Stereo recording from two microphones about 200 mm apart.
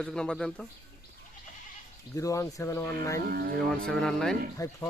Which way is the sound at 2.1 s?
15° left (ahead or behind).